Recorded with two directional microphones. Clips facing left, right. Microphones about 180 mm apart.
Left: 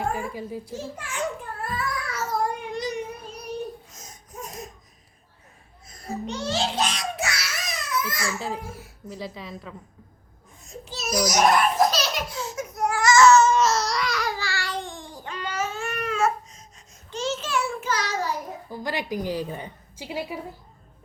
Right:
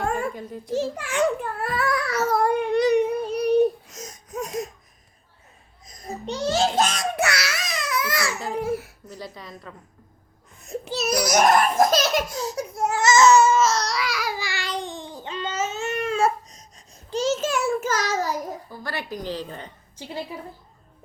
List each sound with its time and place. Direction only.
0.3 s a woman's voice: 5° left (ahead or behind)
0.7 s child singing: 75° right (ahead or behind)
6.2 s babbling: 35° right (ahead or behind); by 8.3 s 75° right (ahead or behind)
8.6 s a child's voice: 70° right (ahead or behind)
9.0 s a woman's voice: centre (ahead or behind)
10.6 s a sound: 65° right (ahead or behind); by 13.4 s 20° right (ahead or behind)
13.4 s babbling: centre (ahead or behind); by 16.6 s 35° right (ahead or behind)
17.1 s a sound: 40° right (ahead or behind)
18.7 s a woman's voice: 15° left (ahead or behind)